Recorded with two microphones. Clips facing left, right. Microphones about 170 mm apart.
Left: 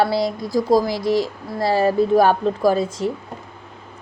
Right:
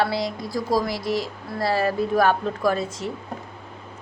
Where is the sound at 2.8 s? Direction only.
90° left.